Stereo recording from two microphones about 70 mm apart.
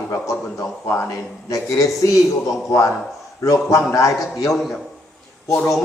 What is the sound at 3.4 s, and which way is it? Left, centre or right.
Speech, left.